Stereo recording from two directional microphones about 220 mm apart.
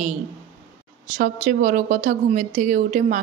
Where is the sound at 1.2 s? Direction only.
35° right (ahead or behind).